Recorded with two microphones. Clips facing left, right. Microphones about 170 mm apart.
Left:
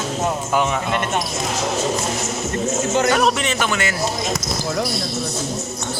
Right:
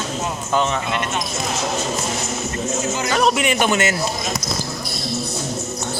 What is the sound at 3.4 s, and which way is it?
Speech, 15° right (ahead or behind).